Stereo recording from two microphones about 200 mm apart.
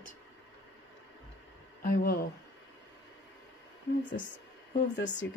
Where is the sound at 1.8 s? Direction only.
45° left (ahead or behind).